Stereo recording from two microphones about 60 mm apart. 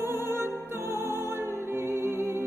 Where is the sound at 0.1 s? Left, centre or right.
Right.